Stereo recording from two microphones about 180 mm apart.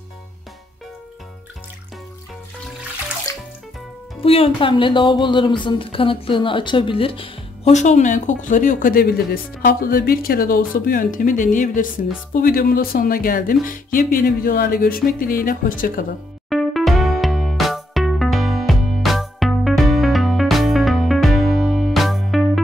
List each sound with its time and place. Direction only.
4.2 s a woman's voice: 30° left (ahead or behind); by 16.1 s 50° left (ahead or behind)
16.4 s music: centre (ahead or behind)